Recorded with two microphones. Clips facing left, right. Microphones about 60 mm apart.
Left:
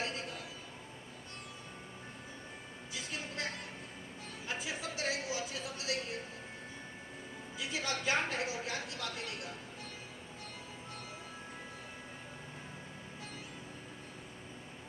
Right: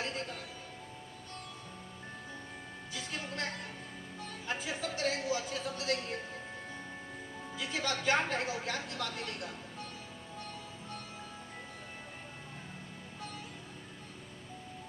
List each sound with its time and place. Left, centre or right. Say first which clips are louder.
0.0 s music: right 1 dB; right
2.9 s music: right 1 dB; right
4.4 s speech: right 3 dB; right
7.6 s speech: right 2 dB; right